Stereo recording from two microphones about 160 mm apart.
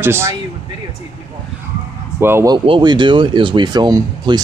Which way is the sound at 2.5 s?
30° right (ahead or behind).